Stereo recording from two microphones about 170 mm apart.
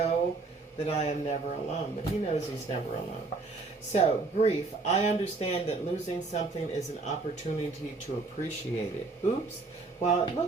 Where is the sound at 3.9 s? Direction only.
40° left (ahead or behind).